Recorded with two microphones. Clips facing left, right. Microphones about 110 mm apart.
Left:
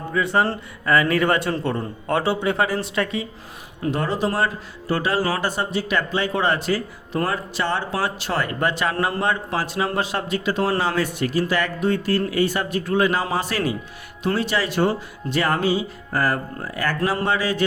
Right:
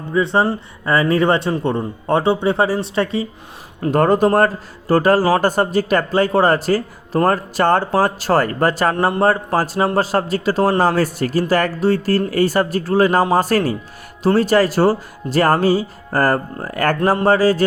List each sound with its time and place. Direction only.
0.1 s a man's voice: 25° right (ahead or behind)
3.8 s speech: 50° right (ahead or behind)
17.2 s speech: 40° right (ahead or behind)